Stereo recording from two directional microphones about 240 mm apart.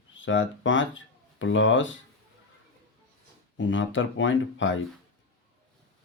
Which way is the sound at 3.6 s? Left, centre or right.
Left.